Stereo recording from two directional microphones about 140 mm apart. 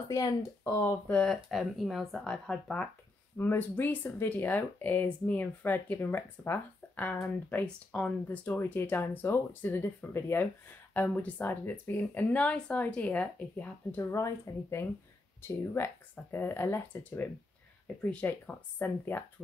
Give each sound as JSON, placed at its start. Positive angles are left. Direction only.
{"t": 0.1, "sound": "speech", "side_deg": 25}
{"t": 1.1, "sound": "speech", "side_deg": 5}